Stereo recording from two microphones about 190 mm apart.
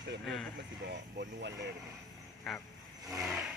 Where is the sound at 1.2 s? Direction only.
60° right (ahead or behind).